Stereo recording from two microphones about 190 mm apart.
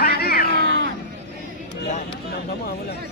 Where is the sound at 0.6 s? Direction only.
90° right.